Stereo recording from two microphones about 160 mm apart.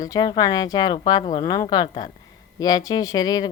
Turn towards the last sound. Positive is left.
turn(degrees=25)  # may be behind; listen again after turning